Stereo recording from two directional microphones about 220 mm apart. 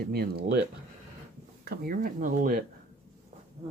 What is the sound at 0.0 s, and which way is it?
Speech, 45° right (ahead or behind).